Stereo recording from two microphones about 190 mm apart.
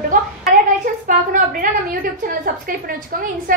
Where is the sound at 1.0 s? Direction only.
45° right (ahead or behind).